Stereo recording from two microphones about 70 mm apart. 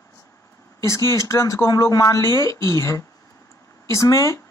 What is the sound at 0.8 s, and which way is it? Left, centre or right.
Speech, left.